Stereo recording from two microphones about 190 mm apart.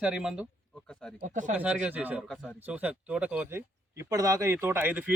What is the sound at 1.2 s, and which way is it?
Speech, 40° right (ahead or behind).